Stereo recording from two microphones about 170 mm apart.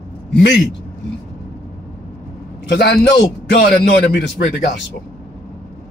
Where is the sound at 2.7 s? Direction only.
70° left (ahead or behind).